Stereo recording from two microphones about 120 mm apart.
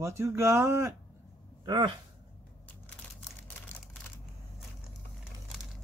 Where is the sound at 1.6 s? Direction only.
35° right (ahead or behind).